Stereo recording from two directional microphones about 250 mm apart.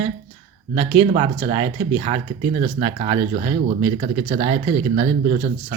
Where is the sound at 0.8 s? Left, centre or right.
Right.